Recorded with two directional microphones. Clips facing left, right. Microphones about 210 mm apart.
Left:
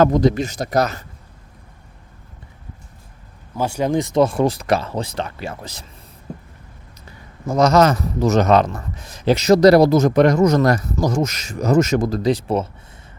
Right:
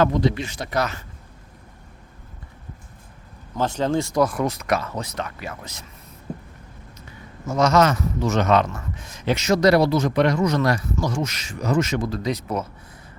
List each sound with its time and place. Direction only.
0.0 s speech: 40° left (ahead or behind)
3.5 s speech: 10° left (ahead or behind); by 5.8 s 30° left (ahead or behind)
7.4 s speech: 35° left (ahead or behind)